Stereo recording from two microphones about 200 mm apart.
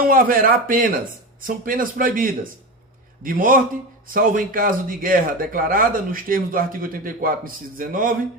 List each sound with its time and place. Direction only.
0.0 s speech: 45° right (ahead or behind)